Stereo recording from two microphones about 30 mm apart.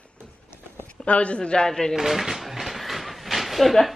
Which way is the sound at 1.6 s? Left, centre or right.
Centre.